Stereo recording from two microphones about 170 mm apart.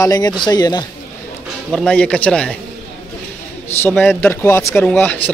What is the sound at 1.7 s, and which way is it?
Speech, 5° left (ahead or behind).